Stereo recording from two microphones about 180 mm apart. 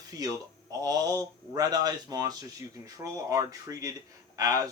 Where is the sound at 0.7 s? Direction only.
20° right (ahead or behind).